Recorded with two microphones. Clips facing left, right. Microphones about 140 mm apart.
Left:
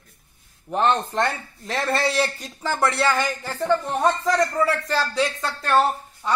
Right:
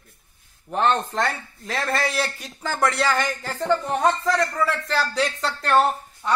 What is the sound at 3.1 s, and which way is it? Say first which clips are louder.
Speech: even; 15° left (ahead or behind).